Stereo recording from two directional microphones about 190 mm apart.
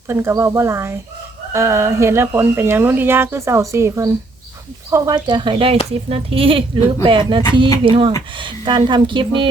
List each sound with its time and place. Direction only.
0.1 s speech: 15° right (ahead or behind)